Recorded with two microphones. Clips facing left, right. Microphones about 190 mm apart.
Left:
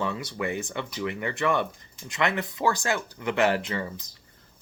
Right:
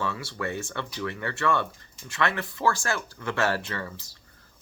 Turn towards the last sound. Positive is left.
turn(degrees=15)  # may be behind; listen again after turning